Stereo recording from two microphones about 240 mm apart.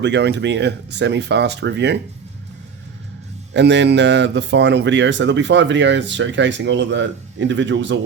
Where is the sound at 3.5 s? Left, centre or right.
Right.